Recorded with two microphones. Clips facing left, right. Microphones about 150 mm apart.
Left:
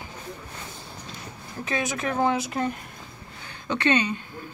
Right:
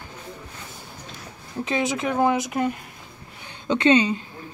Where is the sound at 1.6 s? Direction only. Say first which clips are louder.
Right 3 dB; 20° right (ahead or behind).